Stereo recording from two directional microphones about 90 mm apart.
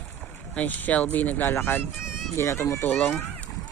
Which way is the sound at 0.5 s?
20° left (ahead or behind).